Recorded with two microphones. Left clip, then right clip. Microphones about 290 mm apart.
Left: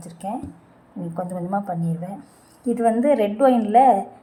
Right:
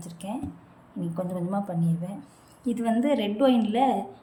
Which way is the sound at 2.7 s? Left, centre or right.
Centre.